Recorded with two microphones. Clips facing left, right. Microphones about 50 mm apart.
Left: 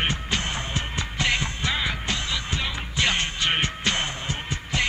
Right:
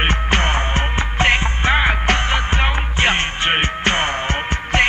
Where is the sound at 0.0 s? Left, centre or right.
Right.